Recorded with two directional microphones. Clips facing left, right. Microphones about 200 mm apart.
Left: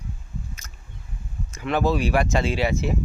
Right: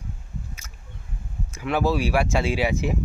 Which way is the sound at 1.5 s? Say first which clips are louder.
Left 1 dB; 10° right (ahead or behind).